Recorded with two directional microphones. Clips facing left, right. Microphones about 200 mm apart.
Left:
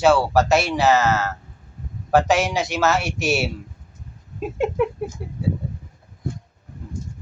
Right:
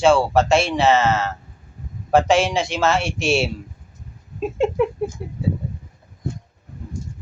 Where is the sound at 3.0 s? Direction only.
25° right (ahead or behind).